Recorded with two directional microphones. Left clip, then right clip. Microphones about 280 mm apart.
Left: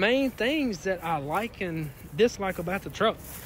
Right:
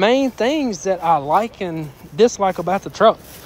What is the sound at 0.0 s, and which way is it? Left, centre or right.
Speech, right.